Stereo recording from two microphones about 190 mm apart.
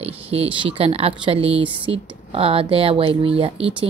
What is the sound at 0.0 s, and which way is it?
Speech, 30° right (ahead or behind).